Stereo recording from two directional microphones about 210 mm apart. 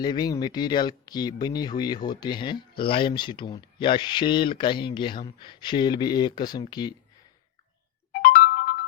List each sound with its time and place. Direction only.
0.0 s speech: 20° left (ahead or behind)
8.1 s music: 40° left (ahead or behind)